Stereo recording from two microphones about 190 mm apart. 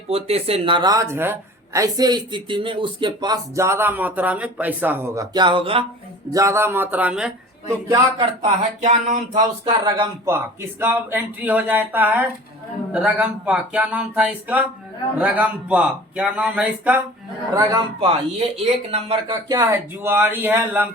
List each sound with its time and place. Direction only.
0.1 s a woman's voice: 30° right (ahead or behind)
6.3 s speech: 15° right (ahead or behind)
7.9 s a woman's voice: 20° right (ahead or behind)
8.8 s a sound: 40° right (ahead or behind)
9.8 s speech: 20° right (ahead or behind)
17.5 s a woman's voice: 20° right (ahead or behind)
18.9 s a sound: 30° right (ahead or behind)
19.3 s speech: 15° right (ahead or behind)